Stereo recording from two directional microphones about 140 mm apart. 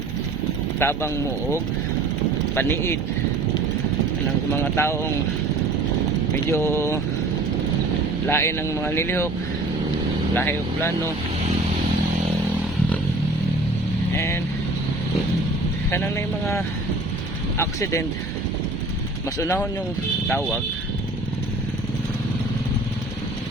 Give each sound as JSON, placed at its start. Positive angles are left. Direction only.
{"t": 0.8, "sound": "speech", "side_deg": 20}
{"t": 2.6, "sound": "speech", "side_deg": 15}
{"t": 4.5, "sound": "speech", "side_deg": 20}
{"t": 6.3, "sound": "speech", "side_deg": 20}
{"t": 8.3, "sound": "speech", "side_deg": 20}
{"t": 10.3, "sound": "speech", "side_deg": 15}
{"t": 14.2, "sound": "speech", "side_deg": 20}
{"t": 15.9, "sound": "speech", "side_deg": 20}
{"t": 17.6, "sound": "speech", "side_deg": 20}
{"t": 19.4, "sound": "speech", "side_deg": 20}